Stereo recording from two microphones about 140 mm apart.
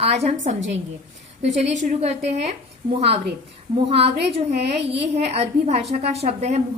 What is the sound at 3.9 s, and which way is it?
A woman's voice, 45° right (ahead or behind).